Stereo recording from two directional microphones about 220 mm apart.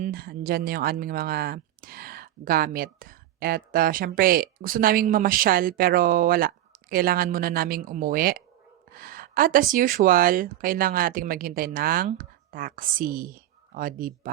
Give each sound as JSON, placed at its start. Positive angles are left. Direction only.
{"t": 0.0, "sound": "speech", "side_deg": -45}